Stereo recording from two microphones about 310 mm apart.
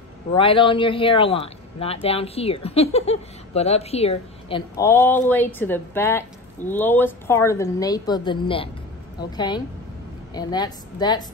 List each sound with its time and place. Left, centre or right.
0.3 s a man's voice: centre
10.3 s a man's voice: centre